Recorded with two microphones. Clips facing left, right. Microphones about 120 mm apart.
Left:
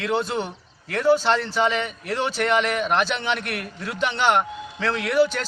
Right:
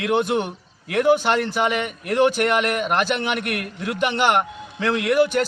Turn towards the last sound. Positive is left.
turn(degrees=-10)  # may be behind; listen again after turning